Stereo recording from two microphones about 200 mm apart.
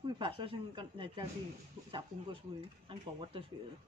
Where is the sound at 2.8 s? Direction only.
25° right (ahead or behind).